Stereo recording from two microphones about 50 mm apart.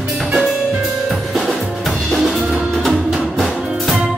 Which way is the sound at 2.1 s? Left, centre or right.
Centre.